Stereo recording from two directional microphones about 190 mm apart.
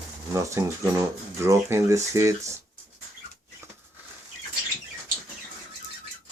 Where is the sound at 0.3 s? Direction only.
15° right (ahead or behind).